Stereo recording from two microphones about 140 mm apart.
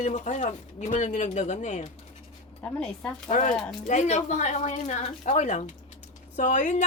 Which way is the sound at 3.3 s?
60° left (ahead or behind).